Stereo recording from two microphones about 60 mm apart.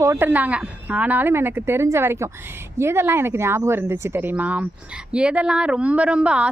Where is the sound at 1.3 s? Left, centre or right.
Right.